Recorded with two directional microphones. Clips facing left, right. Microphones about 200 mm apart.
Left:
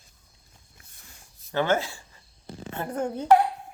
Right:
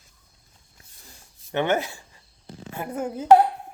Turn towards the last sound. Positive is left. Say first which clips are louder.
# even
turn(degrees=-5)  # may be behind; listen again after turning